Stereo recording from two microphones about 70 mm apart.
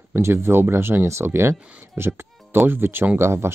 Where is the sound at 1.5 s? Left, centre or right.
Centre.